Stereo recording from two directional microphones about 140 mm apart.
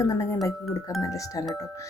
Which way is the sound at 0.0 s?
20° left (ahead or behind).